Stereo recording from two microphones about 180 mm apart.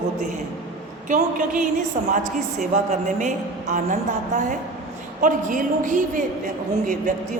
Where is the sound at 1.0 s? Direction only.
45° right (ahead or behind).